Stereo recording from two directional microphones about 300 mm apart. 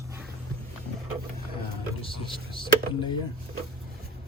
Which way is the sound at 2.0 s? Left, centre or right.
Centre.